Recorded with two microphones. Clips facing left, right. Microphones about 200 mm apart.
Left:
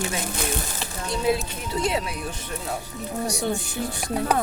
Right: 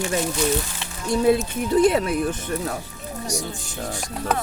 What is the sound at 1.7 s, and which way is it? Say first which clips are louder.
Speech: right 8 dB; 55° right (ahead or behind).